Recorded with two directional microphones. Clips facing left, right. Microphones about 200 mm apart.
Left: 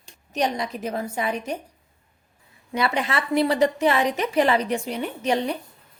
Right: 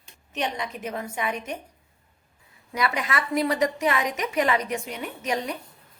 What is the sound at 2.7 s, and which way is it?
A woman's voice, 30° left (ahead or behind).